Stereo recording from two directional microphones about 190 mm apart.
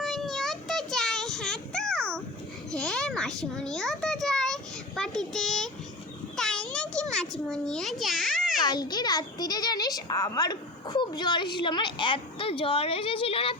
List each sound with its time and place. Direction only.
0.0 s child singing: centre (ahead or behind)
2.7 s a sound: 5° left (ahead or behind)
8.6 s a child's voice: 20° left (ahead or behind)